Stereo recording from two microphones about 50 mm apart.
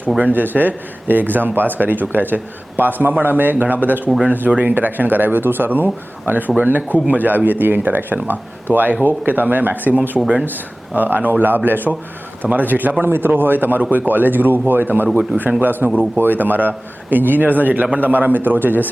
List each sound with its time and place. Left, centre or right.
0.2 s speech: right
10.2 s speech: right
10.4 s speech: right